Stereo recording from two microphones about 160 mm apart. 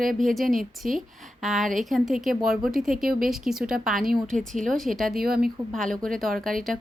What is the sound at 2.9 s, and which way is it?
Speech, 60° right (ahead or behind).